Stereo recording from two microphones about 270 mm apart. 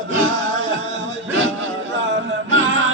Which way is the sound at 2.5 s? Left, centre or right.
Right.